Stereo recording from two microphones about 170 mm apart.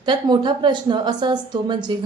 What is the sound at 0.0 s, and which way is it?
A woman's voice, 25° right (ahead or behind).